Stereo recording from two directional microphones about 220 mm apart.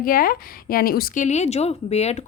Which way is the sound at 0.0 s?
40° left (ahead or behind).